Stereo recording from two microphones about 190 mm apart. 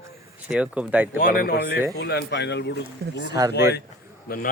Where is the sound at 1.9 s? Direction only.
60° left (ahead or behind).